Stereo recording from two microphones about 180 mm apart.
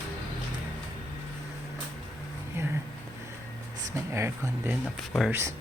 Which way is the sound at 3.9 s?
15° right (ahead or behind).